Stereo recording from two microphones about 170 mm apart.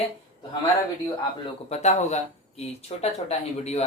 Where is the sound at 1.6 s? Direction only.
40° left (ahead or behind).